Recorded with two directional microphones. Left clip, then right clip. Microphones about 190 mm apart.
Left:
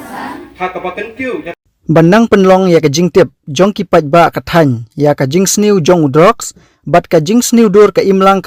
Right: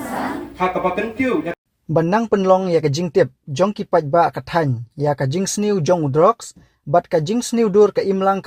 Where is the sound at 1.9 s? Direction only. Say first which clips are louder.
Left 10 dB; 35° left (ahead or behind).